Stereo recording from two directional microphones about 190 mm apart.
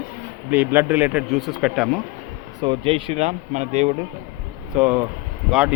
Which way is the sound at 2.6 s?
25° right (ahead or behind).